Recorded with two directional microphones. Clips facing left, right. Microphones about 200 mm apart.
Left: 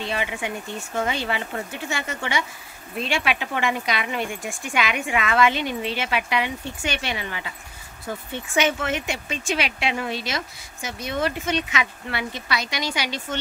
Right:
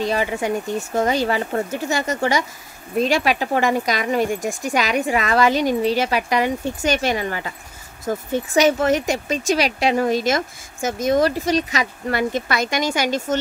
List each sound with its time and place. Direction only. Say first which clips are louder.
0.0 s speech: right 7 dB; 40° right (ahead or behind)